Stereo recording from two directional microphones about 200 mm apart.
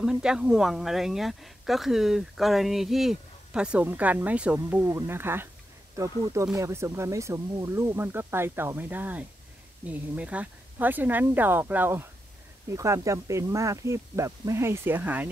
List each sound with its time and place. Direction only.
0.0 s speech: 5° right (ahead or behind)